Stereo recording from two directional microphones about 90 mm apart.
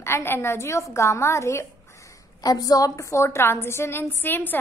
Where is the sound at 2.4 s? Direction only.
45° left (ahead or behind).